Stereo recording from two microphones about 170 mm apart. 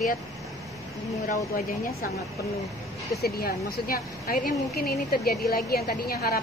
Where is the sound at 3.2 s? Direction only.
60° left (ahead or behind).